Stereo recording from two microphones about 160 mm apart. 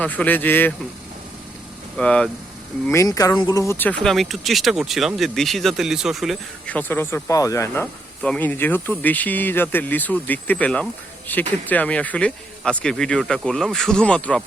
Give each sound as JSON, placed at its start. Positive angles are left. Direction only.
{"t": 0.0, "sound": "speech", "side_deg": 10}
{"t": 2.0, "sound": "speech", "side_deg": 5}
{"t": 2.8, "sound": "speech", "side_deg": 20}
{"t": 4.0, "sound": "speech", "side_deg": 0}
{"t": 6.7, "sound": "speech", "side_deg": 10}
{"t": 8.2, "sound": "speech", "side_deg": 10}